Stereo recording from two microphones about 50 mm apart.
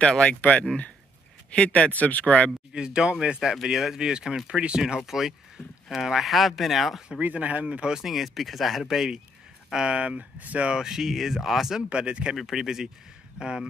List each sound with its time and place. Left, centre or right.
0.4 s speech: left
2.7 s speech: centre
7.2 s speech: right
7.6 s speech: centre
8.0 s speech: centre
9.8 s speech: right; by 11.8 s centre
11.9 s speech: right
12.4 s speech: centre